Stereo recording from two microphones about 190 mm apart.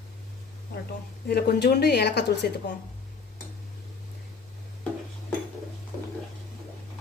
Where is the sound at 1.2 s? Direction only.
55° left (ahead or behind).